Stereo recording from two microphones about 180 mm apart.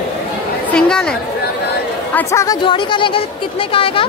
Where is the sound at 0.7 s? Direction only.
5° left (ahead or behind).